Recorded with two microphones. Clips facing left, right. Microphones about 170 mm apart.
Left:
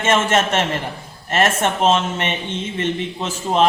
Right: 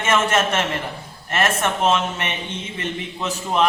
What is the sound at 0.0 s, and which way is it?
A man's voice, 25° left (ahead or behind).